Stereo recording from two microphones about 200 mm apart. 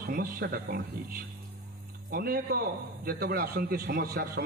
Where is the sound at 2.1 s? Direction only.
50° right (ahead or behind).